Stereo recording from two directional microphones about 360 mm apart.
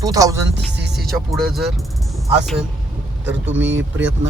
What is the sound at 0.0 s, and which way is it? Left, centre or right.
Speech, centre.